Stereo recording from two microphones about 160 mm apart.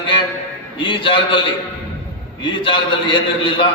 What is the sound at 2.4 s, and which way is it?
A man's voice, 30° left (ahead or behind).